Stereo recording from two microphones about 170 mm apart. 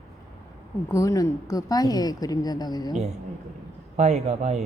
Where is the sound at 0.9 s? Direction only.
20° left (ahead or behind).